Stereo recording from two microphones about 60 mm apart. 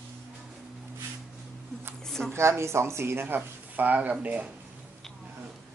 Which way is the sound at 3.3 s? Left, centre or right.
Right.